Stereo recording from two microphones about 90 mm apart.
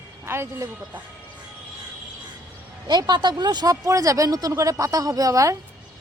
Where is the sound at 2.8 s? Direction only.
50° right (ahead or behind).